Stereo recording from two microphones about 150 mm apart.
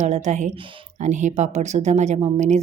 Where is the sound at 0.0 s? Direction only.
50° right (ahead or behind).